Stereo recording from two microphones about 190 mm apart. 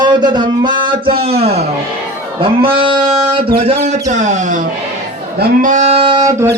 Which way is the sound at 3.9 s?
40° right (ahead or behind).